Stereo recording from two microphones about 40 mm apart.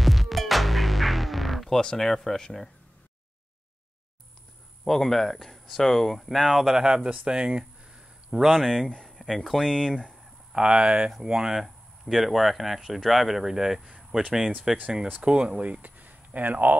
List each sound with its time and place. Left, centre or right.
0.0 s music: centre
1.8 s speech: centre
4.8 s speech: centre
6.8 s speech: centre
8.5 s speech: centre
9.9 s speech: centre
11.4 s speech: centre
14.7 s speech: centre
15.2 s speech: right
15.8 s a sound: right